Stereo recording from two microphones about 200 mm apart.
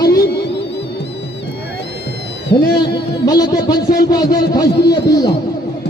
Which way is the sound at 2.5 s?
55° left (ahead or behind).